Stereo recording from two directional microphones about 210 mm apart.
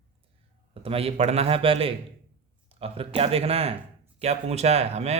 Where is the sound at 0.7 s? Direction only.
25° right (ahead or behind).